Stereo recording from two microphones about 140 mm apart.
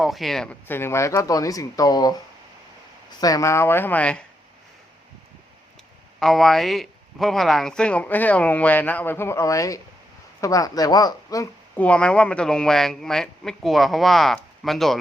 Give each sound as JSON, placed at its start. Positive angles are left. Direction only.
{"t": 0.0, "sound": "speech", "side_deg": 0}
{"t": 0.7, "sound": "speech", "side_deg": 15}
{"t": 3.2, "sound": "speech", "side_deg": 25}
{"t": 6.1, "sound": "speech", "side_deg": 0}
{"t": 11.8, "sound": "speech", "side_deg": 5}